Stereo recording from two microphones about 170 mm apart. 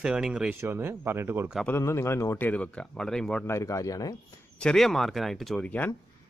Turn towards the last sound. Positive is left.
turn(degrees=10)  # may be behind; listen again after turning